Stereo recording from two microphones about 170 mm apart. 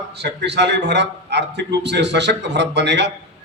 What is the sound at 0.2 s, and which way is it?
A man's voice, 80° right.